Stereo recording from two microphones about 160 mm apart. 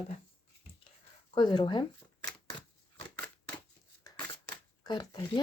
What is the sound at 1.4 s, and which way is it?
Speech, 25° left (ahead or behind).